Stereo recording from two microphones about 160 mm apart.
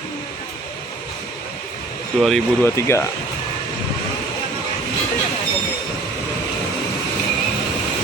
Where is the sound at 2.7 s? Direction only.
15° left (ahead or behind).